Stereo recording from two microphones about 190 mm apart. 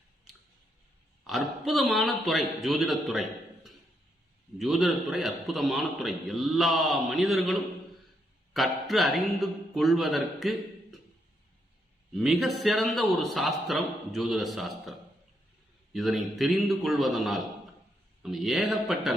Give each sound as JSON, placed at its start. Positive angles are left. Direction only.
{"t": 1.3, "sound": "a man's voice", "side_deg": 0}
{"t": 12.1, "sound": "a man's voice", "side_deg": 0}